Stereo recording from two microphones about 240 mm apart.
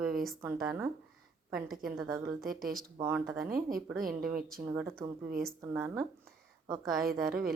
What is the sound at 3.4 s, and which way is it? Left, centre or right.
Speech, right.